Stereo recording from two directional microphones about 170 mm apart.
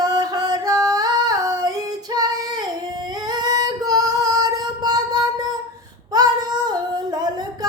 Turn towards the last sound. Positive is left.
turn(degrees=-25)  # may be behind; listen again after turning